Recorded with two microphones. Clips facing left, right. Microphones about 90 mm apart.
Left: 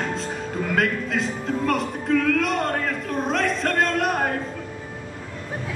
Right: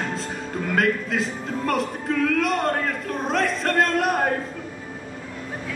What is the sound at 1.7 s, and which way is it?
Speech, centre (ahead or behind).